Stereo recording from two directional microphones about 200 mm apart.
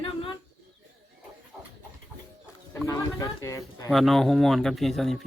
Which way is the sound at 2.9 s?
20° left (ahead or behind).